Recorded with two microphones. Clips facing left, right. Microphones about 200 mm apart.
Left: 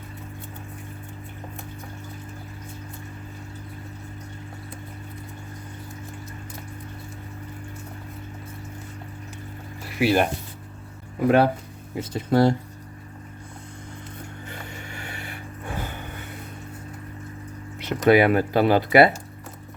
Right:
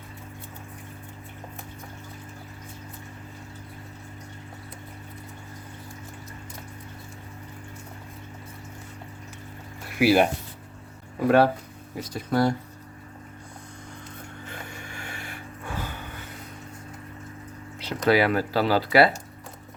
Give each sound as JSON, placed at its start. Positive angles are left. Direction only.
{"t": 9.8, "sound": "music", "side_deg": 0}
{"t": 11.3, "sound": "speech", "side_deg": 15}
{"t": 11.9, "sound": "speech", "side_deg": 25}
{"t": 14.7, "sound": "vehicle", "side_deg": -50}
{"t": 15.6, "sound": "a sound", "side_deg": 15}
{"t": 17.8, "sound": "speech", "side_deg": 20}